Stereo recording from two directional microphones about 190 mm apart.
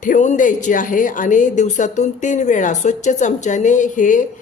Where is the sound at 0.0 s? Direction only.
40° left (ahead or behind).